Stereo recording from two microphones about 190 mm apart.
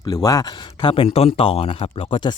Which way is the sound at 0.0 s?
20° left (ahead or behind).